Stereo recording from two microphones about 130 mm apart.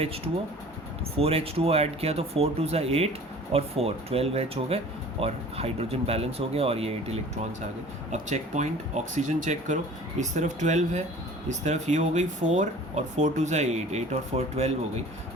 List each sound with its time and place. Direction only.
1.1 s speech: 45° right (ahead or behind)
8.1 s speech: 65° right (ahead or behind)